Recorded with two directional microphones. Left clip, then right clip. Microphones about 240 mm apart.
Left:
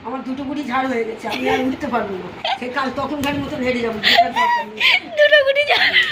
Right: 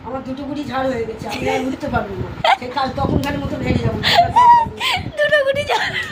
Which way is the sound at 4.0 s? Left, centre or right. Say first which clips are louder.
Right 3 dB; centre.